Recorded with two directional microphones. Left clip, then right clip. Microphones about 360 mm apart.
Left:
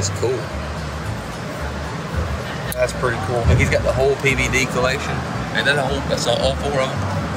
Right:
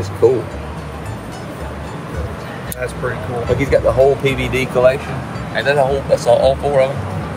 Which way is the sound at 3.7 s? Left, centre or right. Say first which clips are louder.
Right 7 dB; centre.